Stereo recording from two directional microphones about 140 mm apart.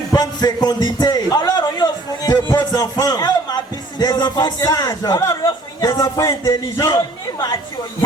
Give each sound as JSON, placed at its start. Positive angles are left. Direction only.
{"t": 0.1, "sound": "a man's voice", "side_deg": 30}